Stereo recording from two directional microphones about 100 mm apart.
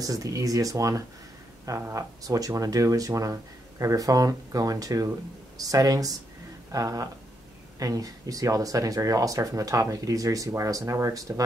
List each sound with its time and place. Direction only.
0.0 s speech: 35° right (ahead or behind)